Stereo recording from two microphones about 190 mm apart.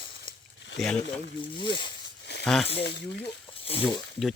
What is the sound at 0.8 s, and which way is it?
Speech, centre (ahead or behind).